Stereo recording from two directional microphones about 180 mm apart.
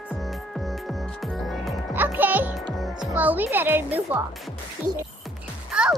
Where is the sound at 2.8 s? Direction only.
Centre (ahead or behind).